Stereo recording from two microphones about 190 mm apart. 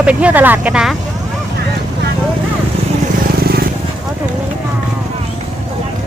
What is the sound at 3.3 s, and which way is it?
Vehicle, 55° right (ahead or behind).